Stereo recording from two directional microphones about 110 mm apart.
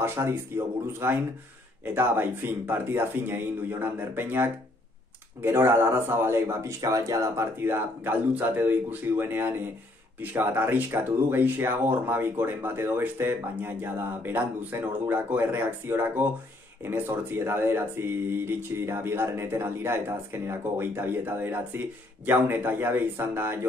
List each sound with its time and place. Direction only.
0.0 s speech: 20° right (ahead or behind)